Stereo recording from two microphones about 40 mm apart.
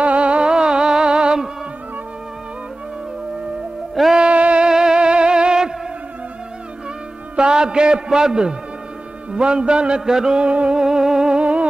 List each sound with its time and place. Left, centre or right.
0.0 s music: right
4.0 s music: centre
4.3 s music: right
4.6 s music: centre
7.3 s a man's voice: right
9.3 s music: right
10.4 s music: right
10.8 s music: centre